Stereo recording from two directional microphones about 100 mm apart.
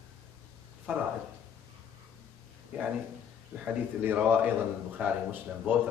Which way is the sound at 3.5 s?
20° right (ahead or behind).